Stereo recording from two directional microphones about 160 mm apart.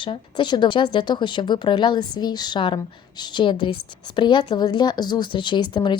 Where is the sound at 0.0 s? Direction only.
30° left (ahead or behind).